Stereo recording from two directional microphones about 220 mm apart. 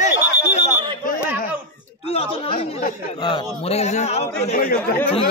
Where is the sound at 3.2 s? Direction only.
20° left (ahead or behind).